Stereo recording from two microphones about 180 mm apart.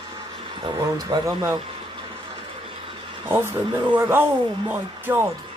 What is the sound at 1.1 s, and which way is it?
Speech, 15° right (ahead or behind).